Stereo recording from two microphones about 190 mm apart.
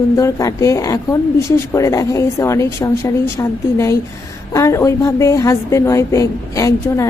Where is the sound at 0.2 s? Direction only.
15° left (ahead or behind).